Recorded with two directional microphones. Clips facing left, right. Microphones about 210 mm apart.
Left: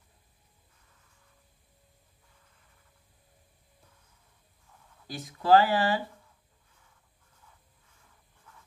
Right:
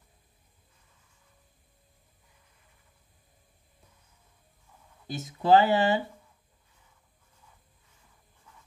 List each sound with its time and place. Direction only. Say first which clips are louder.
5.0 s speech: right 2 dB; 20° right (ahead or behind)